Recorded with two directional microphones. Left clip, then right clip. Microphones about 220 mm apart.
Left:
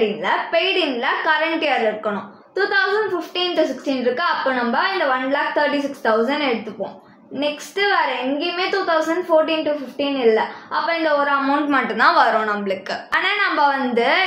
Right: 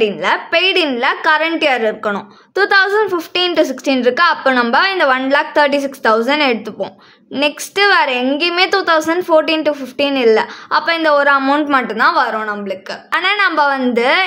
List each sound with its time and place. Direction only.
0.2 s a woman's voice: 30° right (ahead or behind)